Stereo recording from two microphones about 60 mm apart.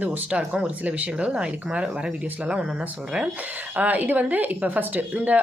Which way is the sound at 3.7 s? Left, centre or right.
Right.